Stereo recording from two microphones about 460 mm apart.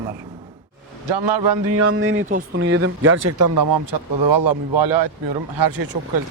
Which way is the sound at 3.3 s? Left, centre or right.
Right.